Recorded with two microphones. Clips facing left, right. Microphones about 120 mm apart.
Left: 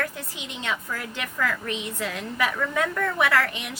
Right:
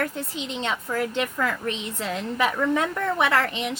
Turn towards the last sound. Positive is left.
turn(degrees=-25)  # may be behind; listen again after turning